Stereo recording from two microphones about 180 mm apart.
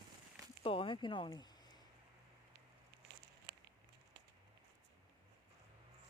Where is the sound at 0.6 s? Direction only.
30° left (ahead or behind).